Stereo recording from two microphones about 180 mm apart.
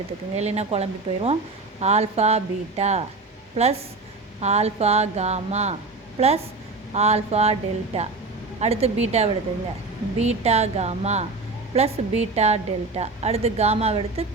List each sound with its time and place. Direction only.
0.3 s a woman's voice: 35° right (ahead or behind)